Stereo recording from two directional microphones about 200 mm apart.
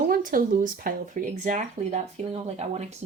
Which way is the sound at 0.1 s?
45° right (ahead or behind).